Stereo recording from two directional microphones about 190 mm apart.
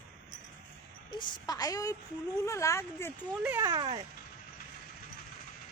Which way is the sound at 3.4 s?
10° right (ahead or behind).